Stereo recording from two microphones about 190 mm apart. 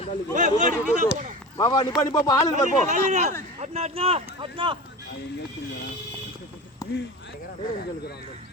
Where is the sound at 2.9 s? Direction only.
35° right (ahead or behind).